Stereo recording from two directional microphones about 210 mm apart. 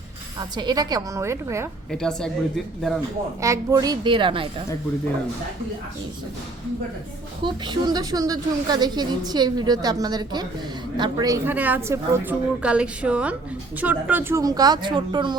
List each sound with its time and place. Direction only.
0.3 s a woman's voice: 20° right (ahead or behind)
1.9 s a woman's voice: 5° left (ahead or behind)
3.4 s a woman's voice: 15° right (ahead or behind)
7.4 s a woman's voice: 20° right (ahead or behind)